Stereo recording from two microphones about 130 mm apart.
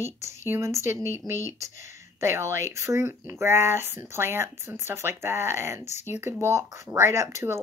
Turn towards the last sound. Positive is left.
turn(degrees=-20)  # may be behind; listen again after turning